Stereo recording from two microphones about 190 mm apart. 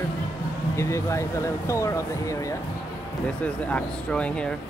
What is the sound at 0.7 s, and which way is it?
Speech, 15° left (ahead or behind).